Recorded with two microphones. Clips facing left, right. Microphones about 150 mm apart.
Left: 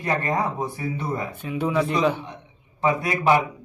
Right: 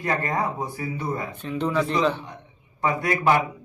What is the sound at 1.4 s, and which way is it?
A man's voice, 10° left (ahead or behind).